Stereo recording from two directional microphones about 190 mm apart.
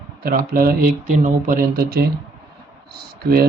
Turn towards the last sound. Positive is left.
turn(degrees=-55)  # may be behind; listen again after turning